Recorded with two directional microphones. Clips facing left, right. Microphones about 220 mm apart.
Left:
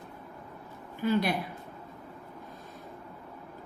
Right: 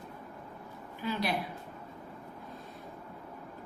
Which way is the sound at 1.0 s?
50° left (ahead or behind).